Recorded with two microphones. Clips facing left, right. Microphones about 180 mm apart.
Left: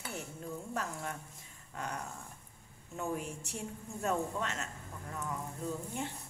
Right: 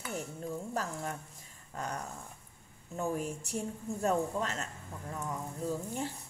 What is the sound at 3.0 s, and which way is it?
A woman's voice, 40° right (ahead or behind).